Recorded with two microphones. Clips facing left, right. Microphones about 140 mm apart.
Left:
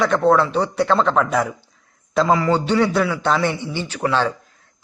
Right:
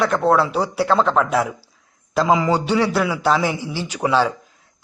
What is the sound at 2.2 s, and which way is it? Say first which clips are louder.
A man's voice: even; 15° right (ahead or behind).